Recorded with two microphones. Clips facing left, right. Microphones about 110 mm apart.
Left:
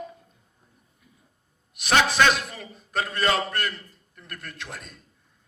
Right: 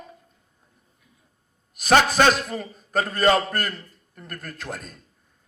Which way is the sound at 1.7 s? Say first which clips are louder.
Right 4 dB; 40° right (ahead or behind).